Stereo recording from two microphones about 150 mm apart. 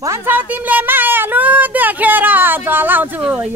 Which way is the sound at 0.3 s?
10° right (ahead or behind).